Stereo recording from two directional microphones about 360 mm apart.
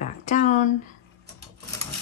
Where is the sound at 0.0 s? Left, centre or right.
Centre.